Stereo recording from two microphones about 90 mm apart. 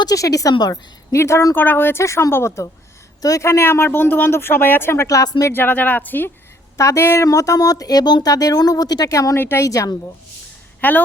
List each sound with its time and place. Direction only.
0.0 s speech: 40° left (ahead or behind); by 5.0 s 25° left (ahead or behind)
5.0 s speech: 40° left (ahead or behind)
5.4 s speech: 25° left (ahead or behind)
6.7 s speech: 30° left (ahead or behind)
9.4 s speech: 25° left (ahead or behind)
9.6 s speech: 40° left (ahead or behind)
10.8 s speech: 20° left (ahead or behind)